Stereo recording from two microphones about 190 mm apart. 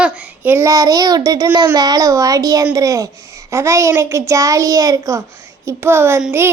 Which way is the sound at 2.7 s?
15° right (ahead or behind).